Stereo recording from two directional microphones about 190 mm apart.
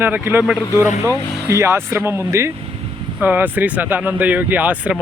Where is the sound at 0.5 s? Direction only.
20° left (ahead or behind).